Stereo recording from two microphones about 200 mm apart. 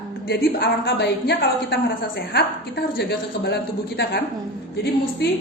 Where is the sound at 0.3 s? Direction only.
55° left (ahead or behind).